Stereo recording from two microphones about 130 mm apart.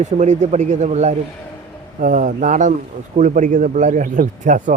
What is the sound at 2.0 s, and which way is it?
Speech, 75° right (ahead or behind).